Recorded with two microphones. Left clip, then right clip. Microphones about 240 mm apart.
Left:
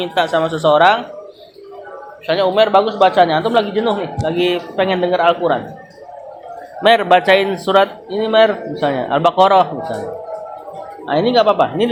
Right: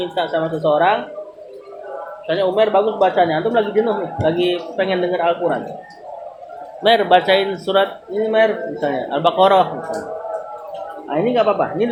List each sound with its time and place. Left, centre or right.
0.0 s speech: left
2.2 s speech: left
6.8 s speech: left
11.1 s speech: left